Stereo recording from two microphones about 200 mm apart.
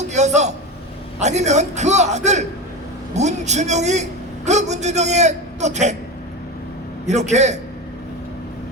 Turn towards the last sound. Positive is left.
turn(degrees=-35)  # may be behind; listen again after turning